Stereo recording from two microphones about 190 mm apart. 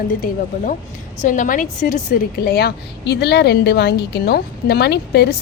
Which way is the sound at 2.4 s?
55° left (ahead or behind).